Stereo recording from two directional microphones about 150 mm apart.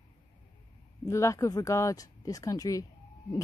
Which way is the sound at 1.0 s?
20° left (ahead or behind).